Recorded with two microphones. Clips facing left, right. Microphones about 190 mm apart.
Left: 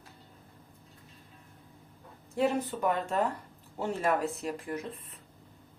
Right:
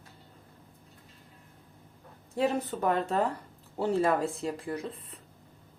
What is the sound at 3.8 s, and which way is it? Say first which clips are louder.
Speech: right 3 dB; 35° right (ahead or behind).